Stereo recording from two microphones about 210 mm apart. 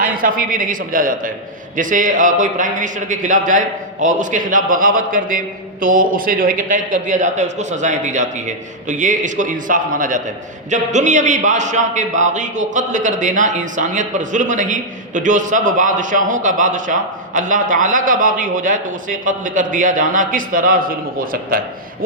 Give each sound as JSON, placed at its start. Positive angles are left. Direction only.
{"t": 0.0, "sound": "a man's voice", "side_deg": -40}